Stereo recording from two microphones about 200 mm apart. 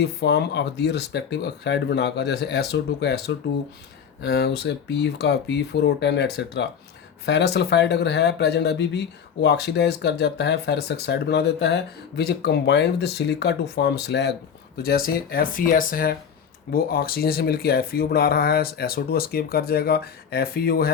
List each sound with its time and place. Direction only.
0.0 s speech: 55° left (ahead or behind)